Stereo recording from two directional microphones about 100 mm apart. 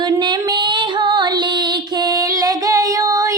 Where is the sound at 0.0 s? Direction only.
50° right (ahead or behind).